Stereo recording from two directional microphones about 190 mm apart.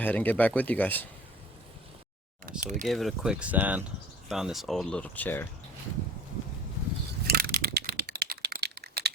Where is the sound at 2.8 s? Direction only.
Centre (ahead or behind).